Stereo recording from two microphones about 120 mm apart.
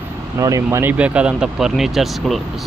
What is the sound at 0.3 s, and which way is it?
Speech, 30° right (ahead or behind).